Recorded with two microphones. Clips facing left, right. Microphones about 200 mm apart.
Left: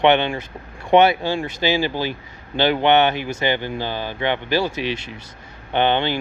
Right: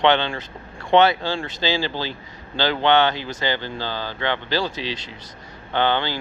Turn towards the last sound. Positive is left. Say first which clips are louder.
# left 3 dB
turn(degrees=20)  # may be behind; listen again after turning